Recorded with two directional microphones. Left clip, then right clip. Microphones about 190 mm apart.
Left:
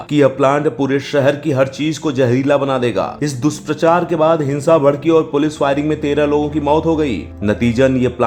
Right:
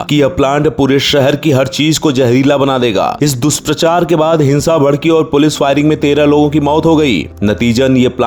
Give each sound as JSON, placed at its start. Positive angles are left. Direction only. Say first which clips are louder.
{"t": 0.1, "sound": "speech", "louder": "right 1 dB", "side_deg": -35}